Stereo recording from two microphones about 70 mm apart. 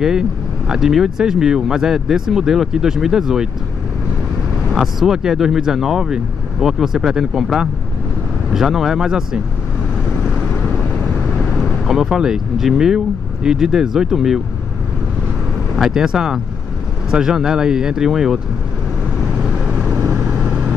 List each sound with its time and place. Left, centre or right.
0.7 s speech: centre
4.6 s speech: centre
11.8 s speech: centre
15.7 s speech: centre
19.6 s vehicle: centre